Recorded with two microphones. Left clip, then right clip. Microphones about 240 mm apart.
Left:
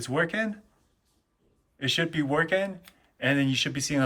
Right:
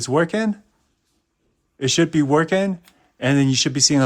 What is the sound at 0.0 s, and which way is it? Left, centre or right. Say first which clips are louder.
Speech: right 7 dB; centre.